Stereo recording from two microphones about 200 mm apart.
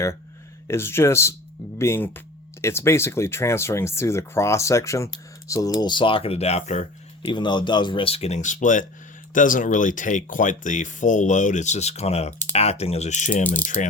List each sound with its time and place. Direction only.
0.7 s speech: 10° left (ahead or behind); by 13.9 s 40° left (ahead or behind)